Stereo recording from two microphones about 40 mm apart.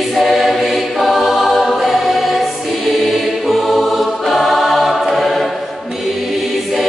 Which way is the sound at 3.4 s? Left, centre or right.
Centre.